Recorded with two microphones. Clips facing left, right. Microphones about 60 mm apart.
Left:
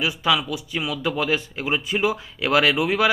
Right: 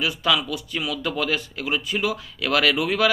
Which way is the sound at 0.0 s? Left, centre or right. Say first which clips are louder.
Left 1 dB; centre.